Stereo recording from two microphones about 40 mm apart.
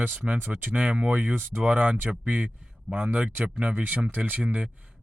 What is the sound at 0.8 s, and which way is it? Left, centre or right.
Speech, right.